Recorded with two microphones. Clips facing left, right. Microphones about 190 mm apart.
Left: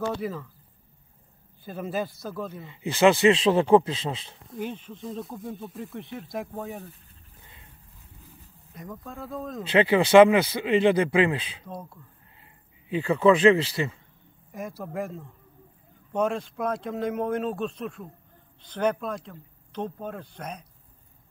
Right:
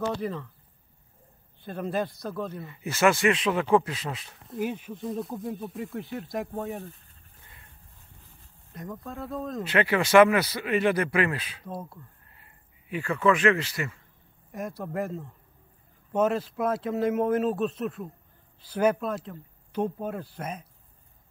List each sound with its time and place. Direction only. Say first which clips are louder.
0.0 s speech: even; 5° left (ahead or behind)
1.6 s speech: right 1 dB; centre (ahead or behind)
2.6 s speech: left 4 dB; 20° left (ahead or behind)
4.5 s speech: right 3 dB; 5° right (ahead or behind)
8.7 s speech: right 2 dB; centre (ahead or behind)
9.7 s speech: left 4 dB; 25° left (ahead or behind)
11.6 s speech: right 2 dB; 5° right (ahead or behind)
12.9 s speech: left 4 dB; 25° left (ahead or behind)
14.5 s speech: right 1 dB; centre (ahead or behind)